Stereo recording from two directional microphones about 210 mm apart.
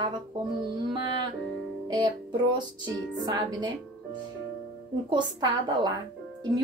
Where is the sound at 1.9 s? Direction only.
20° right (ahead or behind).